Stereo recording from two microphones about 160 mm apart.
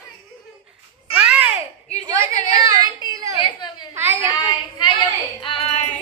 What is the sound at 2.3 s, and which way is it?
Speech, 45° left (ahead or behind).